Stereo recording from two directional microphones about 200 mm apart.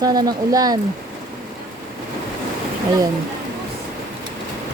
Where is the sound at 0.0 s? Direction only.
20° right (ahead or behind).